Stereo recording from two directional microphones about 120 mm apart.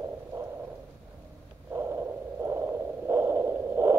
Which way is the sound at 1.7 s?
20° right (ahead or behind).